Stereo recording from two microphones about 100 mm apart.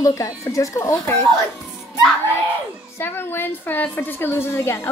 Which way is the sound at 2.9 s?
20° left (ahead or behind).